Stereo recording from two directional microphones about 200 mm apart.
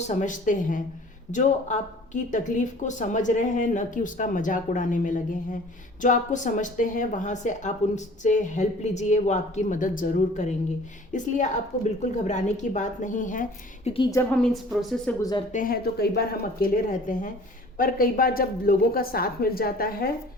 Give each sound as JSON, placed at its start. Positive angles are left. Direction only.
{"t": 0.1, "sound": "a woman's voice", "side_deg": 40}
{"t": 13.9, "sound": "a woman's voice", "side_deg": 25}
{"t": 14.2, "sound": "speech", "side_deg": 5}
{"t": 15.2, "sound": "a woman's voice", "side_deg": 20}
{"t": 15.5, "sound": "a woman's voice", "side_deg": 45}